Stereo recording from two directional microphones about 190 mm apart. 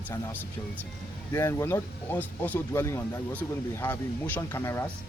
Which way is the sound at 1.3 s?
15° left (ahead or behind).